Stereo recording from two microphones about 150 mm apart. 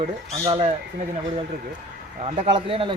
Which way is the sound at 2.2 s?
40° right (ahead or behind).